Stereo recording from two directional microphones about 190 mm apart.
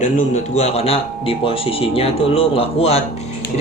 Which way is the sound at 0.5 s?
35° left (ahead or behind).